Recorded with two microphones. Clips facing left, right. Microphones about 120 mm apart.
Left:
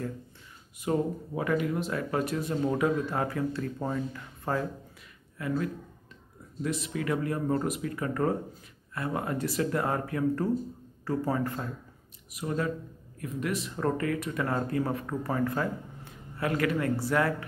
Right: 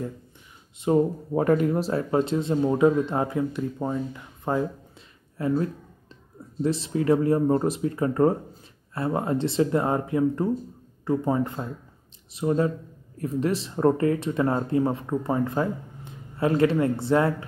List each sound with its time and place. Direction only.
0.9 s speech: 25° right (ahead or behind)
1.3 s speech: 40° right (ahead or behind); by 17.5 s 25° right (ahead or behind)